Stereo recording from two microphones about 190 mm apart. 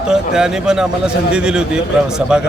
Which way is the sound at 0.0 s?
5° right (ahead or behind).